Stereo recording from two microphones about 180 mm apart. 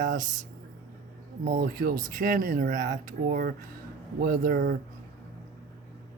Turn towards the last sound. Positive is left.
turn(degrees=-55)  # may be behind; listen again after turning